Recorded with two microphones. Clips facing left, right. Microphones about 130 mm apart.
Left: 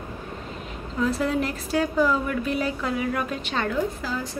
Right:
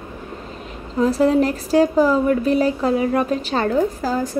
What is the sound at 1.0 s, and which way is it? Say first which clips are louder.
A woman's voice: right 8 dB; 40° right (ahead or behind).